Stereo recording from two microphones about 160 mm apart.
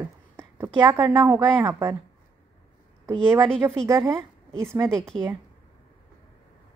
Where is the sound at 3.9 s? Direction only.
20° right (ahead or behind).